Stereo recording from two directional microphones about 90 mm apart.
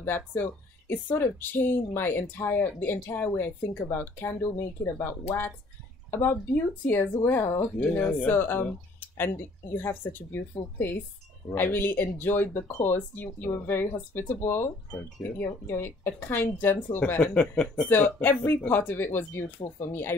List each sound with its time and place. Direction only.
0.0 s speech: 25° left (ahead or behind)
8.6 s a sound: 25° left (ahead or behind)
9.8 s speech: 25° left (ahead or behind)
17.0 s speech: 15° left (ahead or behind)
17.8 s speech: 20° left (ahead or behind)